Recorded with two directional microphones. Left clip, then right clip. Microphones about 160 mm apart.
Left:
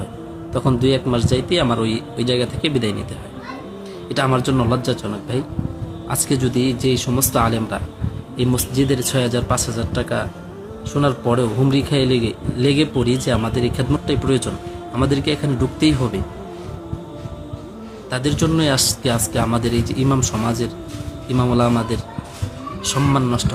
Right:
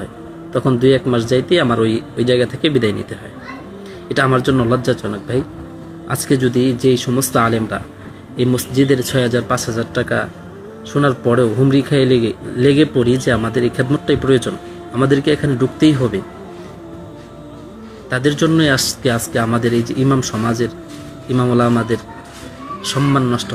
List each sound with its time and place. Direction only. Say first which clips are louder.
0.5 s a man's voice: right 5 dB; 15° left (ahead or behind)
4.1 s a man's voice: right 4 dB; 15° left (ahead or behind)
18.1 s a man's voice: right 5 dB; 15° left (ahead or behind)